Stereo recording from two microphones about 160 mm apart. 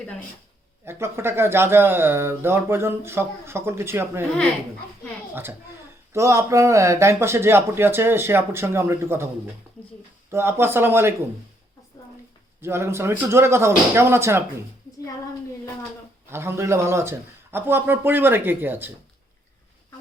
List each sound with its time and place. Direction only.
0.9 s speech: 15° right (ahead or behind)
5.3 s a woman's voice: 15° right (ahead or behind)
12.6 s speech: 15° right (ahead or behind)
16.3 s speech: 15° right (ahead or behind)